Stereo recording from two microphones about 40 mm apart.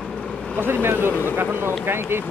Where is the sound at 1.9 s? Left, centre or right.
Right.